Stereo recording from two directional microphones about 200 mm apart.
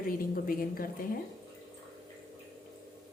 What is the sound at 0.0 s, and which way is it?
Speech, 45° left (ahead or behind).